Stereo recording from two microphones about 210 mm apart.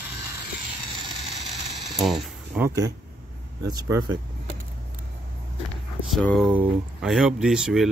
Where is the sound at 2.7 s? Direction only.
15° right (ahead or behind).